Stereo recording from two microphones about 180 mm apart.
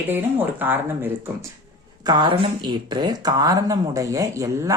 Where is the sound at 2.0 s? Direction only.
25° right (ahead or behind).